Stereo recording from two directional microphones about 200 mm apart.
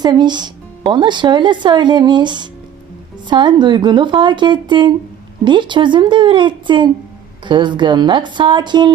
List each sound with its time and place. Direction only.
0.0 s speech: 20° right (ahead or behind)